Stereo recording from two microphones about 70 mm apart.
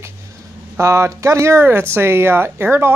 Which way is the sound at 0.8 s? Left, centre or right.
Right.